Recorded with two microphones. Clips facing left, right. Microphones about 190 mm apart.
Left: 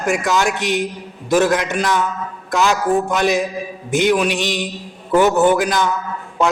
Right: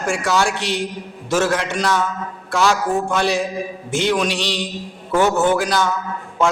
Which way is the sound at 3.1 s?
15° left (ahead or behind).